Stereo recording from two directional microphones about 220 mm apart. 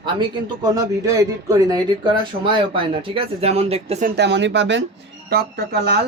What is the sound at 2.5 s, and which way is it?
Speech, 25° right (ahead or behind).